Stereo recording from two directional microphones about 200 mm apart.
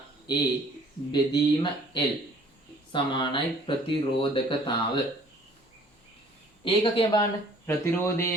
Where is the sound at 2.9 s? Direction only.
25° left (ahead or behind).